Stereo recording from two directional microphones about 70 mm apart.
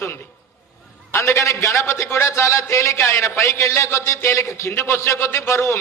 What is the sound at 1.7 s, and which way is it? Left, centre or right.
A man's voice, left.